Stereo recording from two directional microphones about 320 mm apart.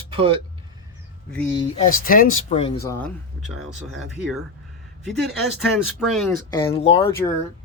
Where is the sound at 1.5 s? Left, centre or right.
Centre.